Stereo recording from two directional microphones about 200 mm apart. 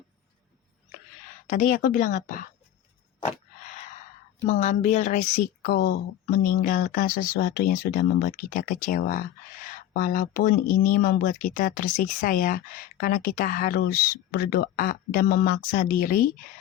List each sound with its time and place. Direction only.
1.5 s a woman's voice: 40° left (ahead or behind)
4.4 s speech: 35° left (ahead or behind)